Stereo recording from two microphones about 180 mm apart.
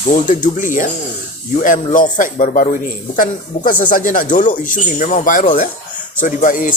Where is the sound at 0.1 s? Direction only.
45° left (ahead or behind).